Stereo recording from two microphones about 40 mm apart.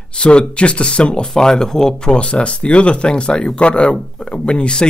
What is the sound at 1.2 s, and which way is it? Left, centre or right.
Speech, centre.